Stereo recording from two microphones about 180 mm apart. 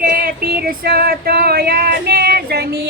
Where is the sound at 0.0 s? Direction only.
55° right (ahead or behind).